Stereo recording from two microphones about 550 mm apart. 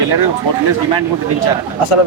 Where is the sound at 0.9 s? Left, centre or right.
Left.